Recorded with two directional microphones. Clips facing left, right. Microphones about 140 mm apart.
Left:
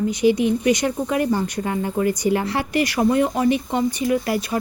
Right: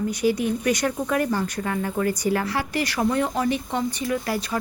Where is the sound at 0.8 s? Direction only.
15° left (ahead or behind).